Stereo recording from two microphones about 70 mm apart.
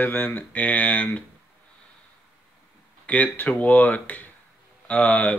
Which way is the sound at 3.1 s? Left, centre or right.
Left.